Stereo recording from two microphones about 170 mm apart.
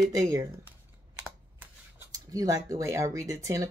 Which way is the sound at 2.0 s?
20° right (ahead or behind).